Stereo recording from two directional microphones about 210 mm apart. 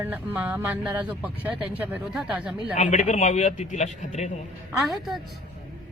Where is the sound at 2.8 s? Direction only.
35° left (ahead or behind).